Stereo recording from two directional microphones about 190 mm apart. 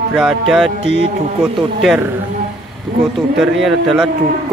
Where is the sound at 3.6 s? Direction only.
Centre (ahead or behind).